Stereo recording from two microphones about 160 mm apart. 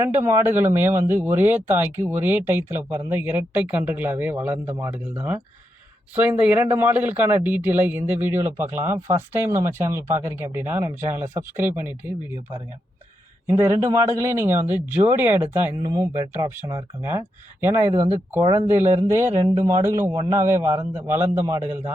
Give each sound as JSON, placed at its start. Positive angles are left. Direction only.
{"t": 0.0, "sound": "speech", "side_deg": -15}
{"t": 13.5, "sound": "speech", "side_deg": -20}